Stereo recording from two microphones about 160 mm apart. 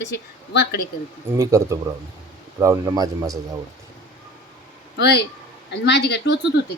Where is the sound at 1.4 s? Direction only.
20° right (ahead or behind).